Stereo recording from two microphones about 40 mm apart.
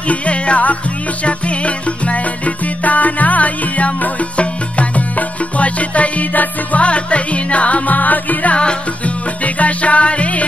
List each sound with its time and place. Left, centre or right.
0.1 s music: left
6.8 s music: left
8.5 s music: left
9.4 s music: left